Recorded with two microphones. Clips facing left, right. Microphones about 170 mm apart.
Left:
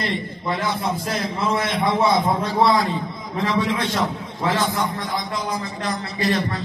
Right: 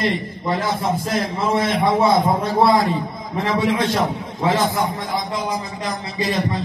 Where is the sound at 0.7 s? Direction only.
45° right (ahead or behind).